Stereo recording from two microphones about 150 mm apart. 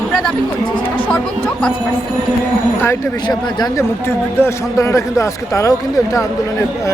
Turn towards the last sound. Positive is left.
turn(degrees=20)  # may be behind; listen again after turning